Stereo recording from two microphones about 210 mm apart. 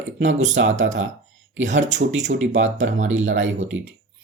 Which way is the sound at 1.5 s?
60° right (ahead or behind).